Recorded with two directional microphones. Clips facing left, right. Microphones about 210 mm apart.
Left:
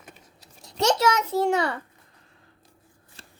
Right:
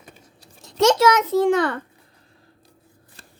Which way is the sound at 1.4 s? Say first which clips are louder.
Right 4 dB; 50° right (ahead or behind).